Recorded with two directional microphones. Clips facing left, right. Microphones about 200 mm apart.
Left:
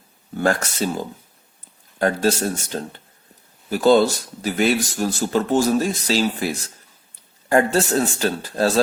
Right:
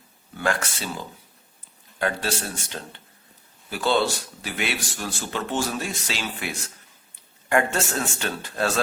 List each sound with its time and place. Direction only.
0.3 s a man's voice: 40° left (ahead or behind)